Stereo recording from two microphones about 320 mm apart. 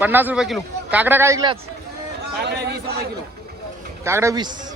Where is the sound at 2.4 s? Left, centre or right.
Right.